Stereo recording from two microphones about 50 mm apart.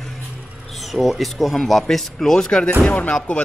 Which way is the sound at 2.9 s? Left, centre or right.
Left.